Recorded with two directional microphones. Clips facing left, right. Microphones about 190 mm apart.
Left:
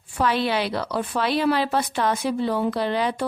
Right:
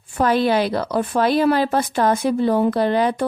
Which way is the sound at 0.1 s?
45° right (ahead or behind).